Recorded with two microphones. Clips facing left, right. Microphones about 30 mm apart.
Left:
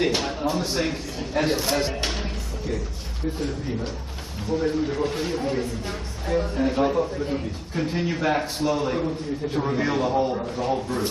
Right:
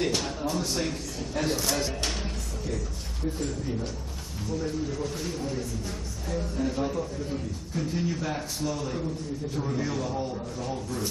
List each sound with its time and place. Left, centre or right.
0.0 s speech: left
3.3 s speech: left